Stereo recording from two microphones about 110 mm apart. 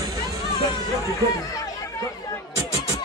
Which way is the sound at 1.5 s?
30° left (ahead or behind).